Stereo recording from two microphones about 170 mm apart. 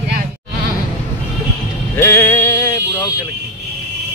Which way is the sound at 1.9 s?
10° left (ahead or behind).